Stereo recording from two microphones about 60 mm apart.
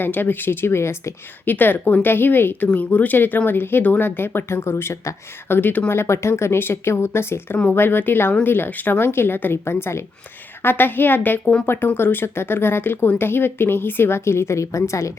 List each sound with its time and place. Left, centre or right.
0.0 s a woman's voice: left
1.5 s a woman's voice: left
5.5 s a woman's voice: left
5.9 s a woman's voice: left